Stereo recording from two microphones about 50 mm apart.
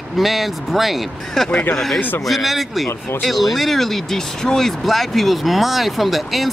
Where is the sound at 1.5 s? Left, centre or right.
Left.